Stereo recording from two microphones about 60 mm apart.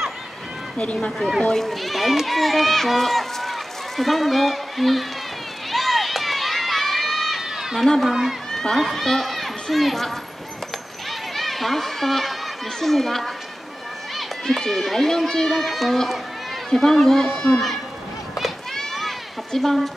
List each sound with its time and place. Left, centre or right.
0.7 s a child's voice: centre
5.7 s run: centre
8.0 s speech: centre
8.5 s speech: centre
11.1 s a sound: centre
12.8 s speech: centre
18.4 s children playing: centre